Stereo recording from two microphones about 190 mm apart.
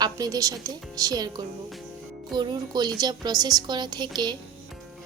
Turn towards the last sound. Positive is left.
turn(degrees=-20)  # may be behind; listen again after turning